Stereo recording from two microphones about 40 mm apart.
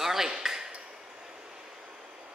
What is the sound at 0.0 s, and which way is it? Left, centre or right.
Ping, centre.